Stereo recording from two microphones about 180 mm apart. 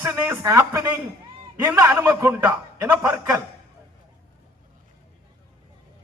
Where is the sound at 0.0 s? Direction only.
15° right (ahead or behind).